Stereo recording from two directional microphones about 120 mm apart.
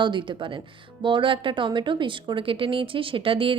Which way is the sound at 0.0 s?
40° right (ahead or behind).